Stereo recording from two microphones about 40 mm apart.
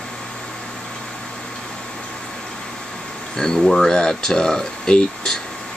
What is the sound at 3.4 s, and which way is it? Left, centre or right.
Speech, centre.